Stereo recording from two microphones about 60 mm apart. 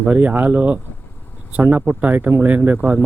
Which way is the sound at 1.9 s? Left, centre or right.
Right.